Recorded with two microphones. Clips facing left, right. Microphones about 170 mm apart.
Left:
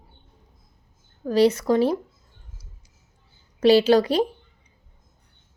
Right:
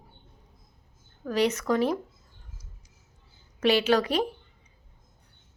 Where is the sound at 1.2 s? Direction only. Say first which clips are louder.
Left 6 dB; 30° left (ahead or behind).